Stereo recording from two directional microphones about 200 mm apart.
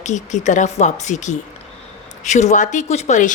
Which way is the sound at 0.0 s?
35° left (ahead or behind).